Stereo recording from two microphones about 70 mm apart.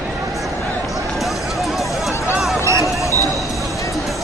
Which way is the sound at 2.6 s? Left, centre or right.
Right.